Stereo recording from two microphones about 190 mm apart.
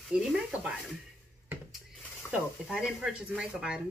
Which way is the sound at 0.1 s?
5° right (ahead or behind).